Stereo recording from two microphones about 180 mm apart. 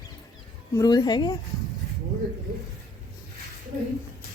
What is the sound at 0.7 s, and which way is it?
Speech, 20° left (ahead or behind).